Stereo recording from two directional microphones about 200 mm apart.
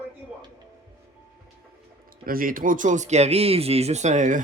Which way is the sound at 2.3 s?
45° right (ahead or behind).